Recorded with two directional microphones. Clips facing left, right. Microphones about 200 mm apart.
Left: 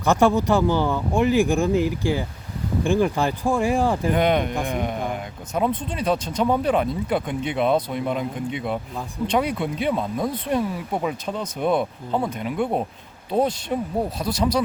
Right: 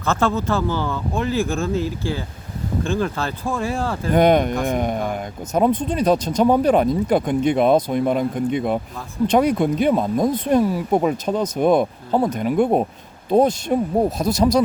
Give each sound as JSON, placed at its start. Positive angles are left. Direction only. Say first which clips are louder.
{"t": 0.0, "sound": "speech", "louder": "left 3 dB", "side_deg": 15}
{"t": 4.1, "sound": "speech", "louder": "right 5 dB", "side_deg": -45}